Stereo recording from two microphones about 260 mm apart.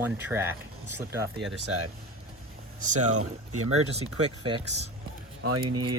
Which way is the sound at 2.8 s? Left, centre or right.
Right.